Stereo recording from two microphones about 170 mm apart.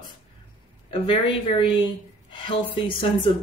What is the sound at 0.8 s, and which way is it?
Speech, 30° left (ahead or behind).